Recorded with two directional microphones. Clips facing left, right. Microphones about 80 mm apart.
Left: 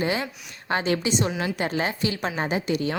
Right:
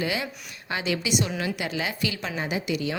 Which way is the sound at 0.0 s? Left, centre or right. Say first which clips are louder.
Left 3 dB; left.